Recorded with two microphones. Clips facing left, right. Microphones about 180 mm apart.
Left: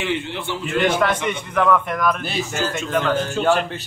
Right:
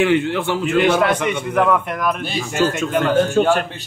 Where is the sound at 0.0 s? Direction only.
55° right (ahead or behind).